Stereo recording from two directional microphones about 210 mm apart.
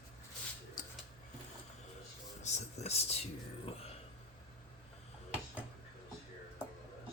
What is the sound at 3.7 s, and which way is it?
Speech, 25° left (ahead or behind).